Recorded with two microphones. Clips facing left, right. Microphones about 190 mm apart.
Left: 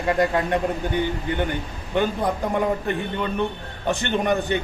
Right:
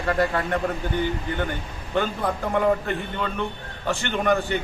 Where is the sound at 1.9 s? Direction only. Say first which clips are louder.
Left 2 dB; 15° left (ahead or behind).